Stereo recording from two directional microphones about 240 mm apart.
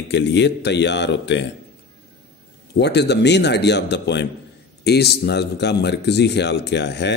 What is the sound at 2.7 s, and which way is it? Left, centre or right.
A man's voice, left.